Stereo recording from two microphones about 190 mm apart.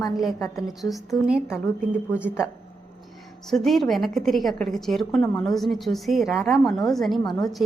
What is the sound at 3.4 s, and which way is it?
A woman's voice, centre (ahead or behind).